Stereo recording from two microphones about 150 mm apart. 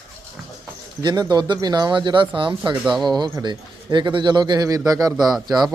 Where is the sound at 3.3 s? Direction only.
30° right (ahead or behind).